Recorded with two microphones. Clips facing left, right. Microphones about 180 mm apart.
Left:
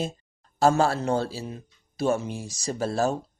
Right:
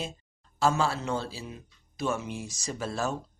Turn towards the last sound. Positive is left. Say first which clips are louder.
# left 6 dB
turn(degrees=35)  # may be behind; listen again after turning